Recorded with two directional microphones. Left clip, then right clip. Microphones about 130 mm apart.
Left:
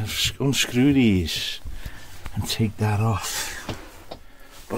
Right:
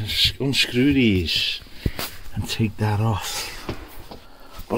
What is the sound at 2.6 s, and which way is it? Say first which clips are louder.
Speech: right 2 dB; 20° right (ahead or behind).